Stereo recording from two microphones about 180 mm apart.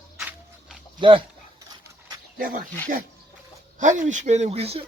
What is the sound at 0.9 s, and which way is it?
Speech, 25° right (ahead or behind).